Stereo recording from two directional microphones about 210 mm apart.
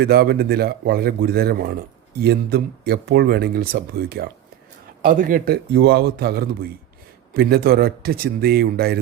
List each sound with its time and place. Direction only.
0.0 s speech: 50° right (ahead or behind)